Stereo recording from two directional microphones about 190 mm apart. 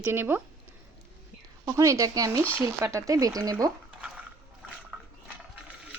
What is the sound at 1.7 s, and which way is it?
Speech, 15° right (ahead or behind).